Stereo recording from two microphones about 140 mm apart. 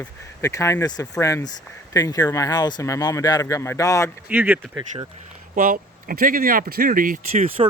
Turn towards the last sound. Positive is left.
turn(degrees=-40)  # may be behind; listen again after turning